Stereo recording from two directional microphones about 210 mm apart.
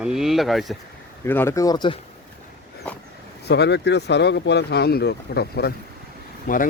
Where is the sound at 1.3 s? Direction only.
10° left (ahead or behind).